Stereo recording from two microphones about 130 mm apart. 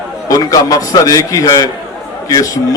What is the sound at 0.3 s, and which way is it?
A man's voice, 30° left (ahead or behind).